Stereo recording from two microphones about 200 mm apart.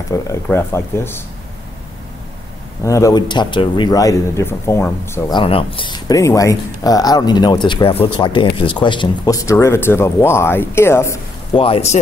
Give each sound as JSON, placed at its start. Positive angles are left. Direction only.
{"t": 0.1, "sound": "speech", "side_deg": 15}
{"t": 2.8, "sound": "speech", "side_deg": 15}
{"t": 5.4, "sound": "speech", "side_deg": 25}
{"t": 11.5, "sound": "speech", "side_deg": 30}